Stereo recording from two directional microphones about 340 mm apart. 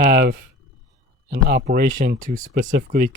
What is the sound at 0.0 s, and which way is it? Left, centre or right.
Speech, right.